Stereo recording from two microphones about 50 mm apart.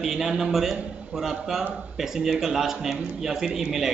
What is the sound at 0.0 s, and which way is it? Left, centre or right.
A man's voice, centre.